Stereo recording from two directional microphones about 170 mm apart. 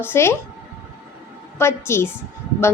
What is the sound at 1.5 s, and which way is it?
Speech, 15° left (ahead or behind).